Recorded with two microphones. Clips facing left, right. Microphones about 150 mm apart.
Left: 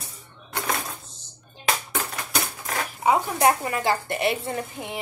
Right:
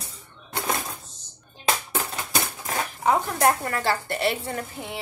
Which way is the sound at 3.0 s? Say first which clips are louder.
Left 1 dB; 5° left (ahead or behind).